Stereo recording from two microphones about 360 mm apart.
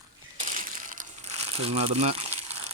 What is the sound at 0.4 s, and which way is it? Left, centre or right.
Crumpling, right.